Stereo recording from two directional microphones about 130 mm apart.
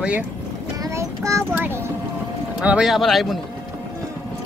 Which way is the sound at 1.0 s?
25° right (ahead or behind).